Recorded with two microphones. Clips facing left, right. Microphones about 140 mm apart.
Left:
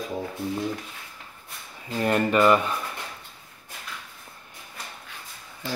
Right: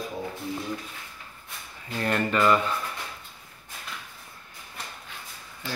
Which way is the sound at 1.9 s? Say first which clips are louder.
Left 4 dB; 20° left (ahead or behind).